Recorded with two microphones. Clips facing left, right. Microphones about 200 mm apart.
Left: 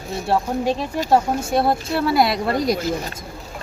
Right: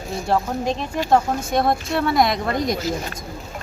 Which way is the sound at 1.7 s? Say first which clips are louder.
Left 1 dB; 5° left (ahead or behind).